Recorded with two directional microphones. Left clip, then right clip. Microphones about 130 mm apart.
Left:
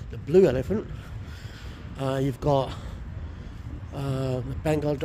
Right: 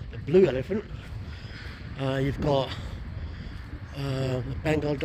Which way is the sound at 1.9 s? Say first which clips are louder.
Left 1 dB; 50° left (ahead or behind).